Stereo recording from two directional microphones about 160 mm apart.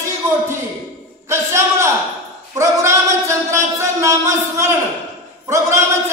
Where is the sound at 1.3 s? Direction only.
15° right (ahead or behind).